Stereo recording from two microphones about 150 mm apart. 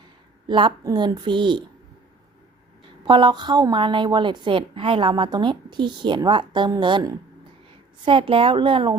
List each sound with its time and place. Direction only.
0.4 s a woman's voice: 30° right (ahead or behind)
3.1 s a woman's voice: 30° right (ahead or behind)